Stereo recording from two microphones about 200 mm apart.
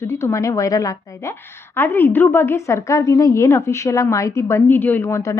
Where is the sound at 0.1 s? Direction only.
15° left (ahead or behind).